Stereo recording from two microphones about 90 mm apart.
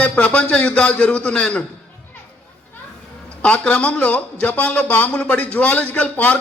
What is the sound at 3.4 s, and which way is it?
Speech, 15° left (ahead or behind).